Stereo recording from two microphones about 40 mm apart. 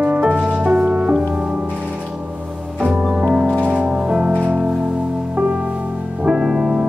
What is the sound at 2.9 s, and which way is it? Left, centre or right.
Music, right.